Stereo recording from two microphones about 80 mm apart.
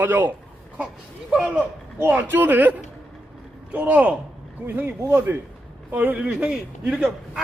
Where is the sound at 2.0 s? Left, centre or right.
Right.